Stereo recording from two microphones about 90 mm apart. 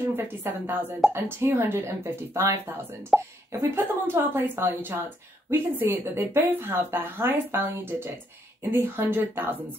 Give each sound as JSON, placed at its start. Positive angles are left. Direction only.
{"t": 0.0, "sound": "a woman's voice", "side_deg": -25}